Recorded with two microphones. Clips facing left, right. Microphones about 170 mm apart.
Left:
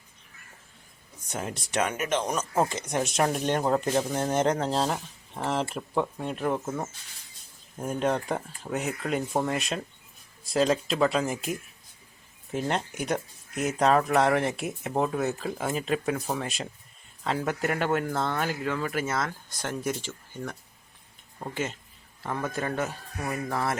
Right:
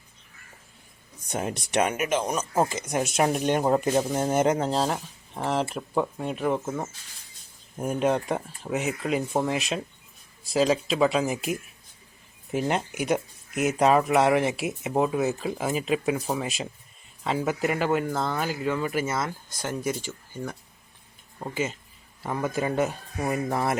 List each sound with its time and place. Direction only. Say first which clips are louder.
1.3 s speech: right 4 dB; 20° right (ahead or behind)